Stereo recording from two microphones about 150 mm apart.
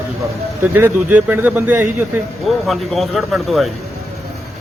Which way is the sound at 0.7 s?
10° right (ahead or behind).